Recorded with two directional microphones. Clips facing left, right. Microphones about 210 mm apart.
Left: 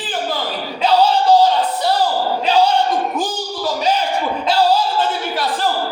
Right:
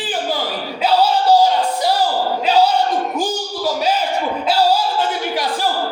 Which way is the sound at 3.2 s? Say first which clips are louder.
Right 1 dB; 5° right (ahead or behind).